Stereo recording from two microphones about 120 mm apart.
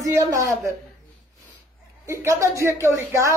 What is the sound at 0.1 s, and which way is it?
Speech, 25° right (ahead or behind).